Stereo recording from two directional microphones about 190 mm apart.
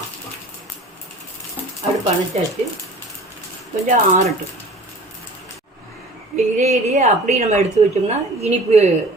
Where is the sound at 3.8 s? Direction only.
40° right (ahead or behind).